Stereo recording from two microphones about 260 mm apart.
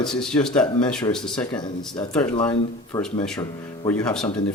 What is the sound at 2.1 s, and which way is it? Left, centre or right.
Speech, centre.